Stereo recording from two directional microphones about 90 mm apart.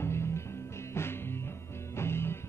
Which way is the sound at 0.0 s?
30° left (ahead or behind).